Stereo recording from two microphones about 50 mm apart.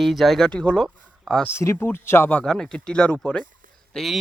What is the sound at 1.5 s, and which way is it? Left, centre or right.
Speech, left.